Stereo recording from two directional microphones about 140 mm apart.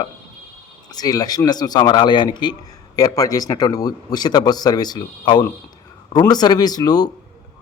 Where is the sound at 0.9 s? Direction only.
25° left (ahead or behind).